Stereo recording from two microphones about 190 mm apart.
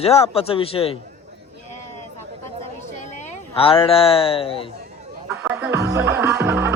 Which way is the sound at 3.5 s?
30° left (ahead or behind).